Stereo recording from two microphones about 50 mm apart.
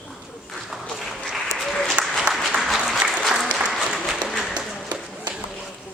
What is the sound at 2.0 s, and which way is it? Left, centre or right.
Applause, right.